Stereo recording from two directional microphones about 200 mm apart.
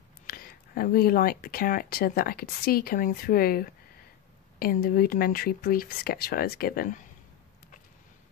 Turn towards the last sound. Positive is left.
turn(degrees=45)  # may be behind; listen again after turning